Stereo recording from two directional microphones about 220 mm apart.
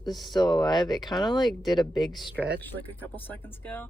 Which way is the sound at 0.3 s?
20° left (ahead or behind).